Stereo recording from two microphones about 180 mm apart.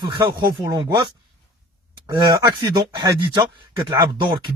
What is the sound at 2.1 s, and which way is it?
Speech, 25° right (ahead or behind).